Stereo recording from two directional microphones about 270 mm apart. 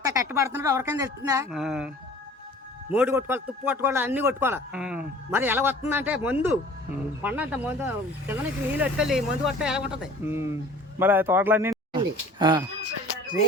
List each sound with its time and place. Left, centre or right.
0.0 s a man's voice: centre
2.9 s a man's voice: centre